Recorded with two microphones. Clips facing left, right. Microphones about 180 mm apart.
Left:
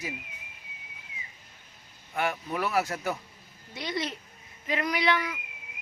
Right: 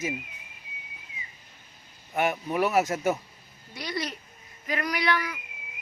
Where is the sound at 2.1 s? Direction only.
20° right (ahead or behind).